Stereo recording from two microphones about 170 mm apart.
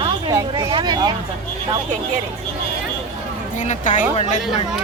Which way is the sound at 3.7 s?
45° left (ahead or behind).